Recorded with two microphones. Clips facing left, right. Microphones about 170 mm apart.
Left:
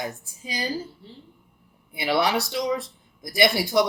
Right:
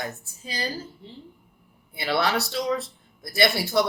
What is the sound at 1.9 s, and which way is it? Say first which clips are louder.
Speech: left 2 dB; 15° left (ahead or behind).